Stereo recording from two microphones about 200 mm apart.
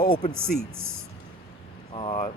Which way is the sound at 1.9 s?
25° left (ahead or behind).